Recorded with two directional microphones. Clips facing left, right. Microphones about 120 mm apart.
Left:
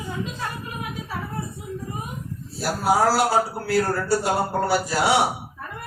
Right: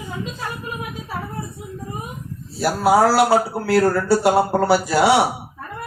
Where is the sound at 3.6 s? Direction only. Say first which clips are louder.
Right 5 dB; 70° right (ahead or behind).